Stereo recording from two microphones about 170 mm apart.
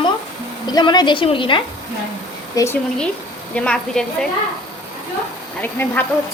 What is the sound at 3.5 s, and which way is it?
Speech, 5° left (ahead or behind).